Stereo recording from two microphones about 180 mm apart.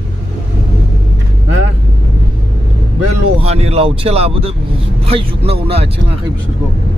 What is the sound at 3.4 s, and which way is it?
Speech, 35° right (ahead or behind).